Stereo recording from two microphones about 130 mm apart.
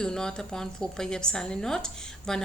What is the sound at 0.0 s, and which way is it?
Speech, 5° left (ahead or behind).